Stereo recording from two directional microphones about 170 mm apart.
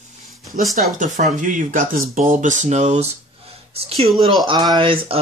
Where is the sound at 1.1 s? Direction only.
50° right (ahead or behind).